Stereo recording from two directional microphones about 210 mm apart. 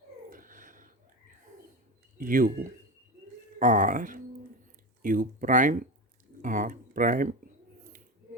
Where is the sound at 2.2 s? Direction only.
40° right (ahead or behind).